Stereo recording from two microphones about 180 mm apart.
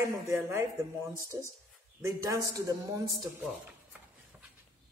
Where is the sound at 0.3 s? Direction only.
15° right (ahead or behind).